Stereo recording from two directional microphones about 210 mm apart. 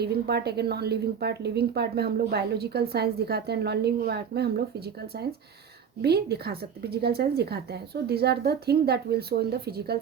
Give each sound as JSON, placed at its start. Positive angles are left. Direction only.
{"t": 0.0, "sound": "a woman's voice", "side_deg": -50}